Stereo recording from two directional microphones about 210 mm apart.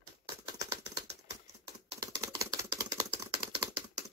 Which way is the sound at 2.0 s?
15° right (ahead or behind).